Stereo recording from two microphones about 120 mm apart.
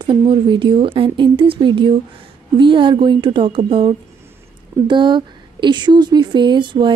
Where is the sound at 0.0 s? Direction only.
40° right (ahead or behind).